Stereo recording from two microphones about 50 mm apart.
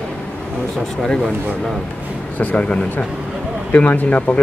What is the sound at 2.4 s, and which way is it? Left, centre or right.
Speech, left.